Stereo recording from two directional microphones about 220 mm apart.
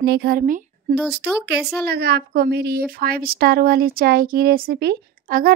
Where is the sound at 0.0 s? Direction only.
45° right (ahead or behind).